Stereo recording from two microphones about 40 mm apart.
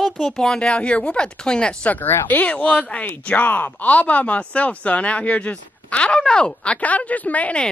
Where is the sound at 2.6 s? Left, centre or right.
Left.